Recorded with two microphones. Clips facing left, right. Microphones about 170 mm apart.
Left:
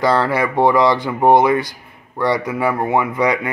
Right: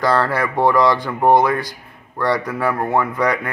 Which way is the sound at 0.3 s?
20° left (ahead or behind).